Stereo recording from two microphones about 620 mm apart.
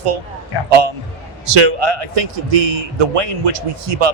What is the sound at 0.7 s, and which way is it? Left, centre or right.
Speech, right.